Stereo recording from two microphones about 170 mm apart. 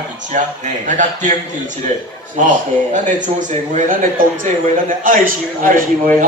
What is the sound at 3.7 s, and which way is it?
A man's voice, 50° right (ahead or behind).